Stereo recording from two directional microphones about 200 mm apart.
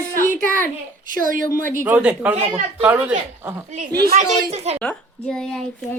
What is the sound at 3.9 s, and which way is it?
Speech, 50° right (ahead or behind).